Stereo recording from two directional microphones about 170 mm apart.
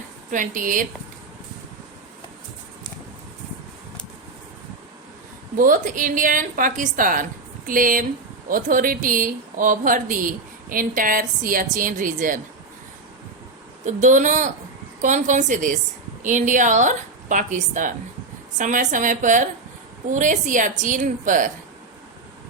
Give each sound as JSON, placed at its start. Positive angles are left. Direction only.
{"t": 0.3, "sound": "speech", "side_deg": -50}
{"t": 5.5, "sound": "speech", "side_deg": -50}
{"t": 13.8, "sound": "speech", "side_deg": -50}